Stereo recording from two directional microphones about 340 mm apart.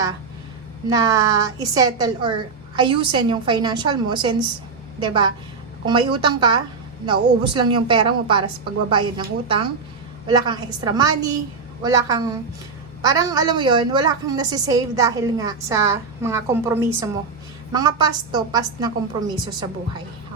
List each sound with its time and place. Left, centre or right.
0.9 s a woman's voice: centre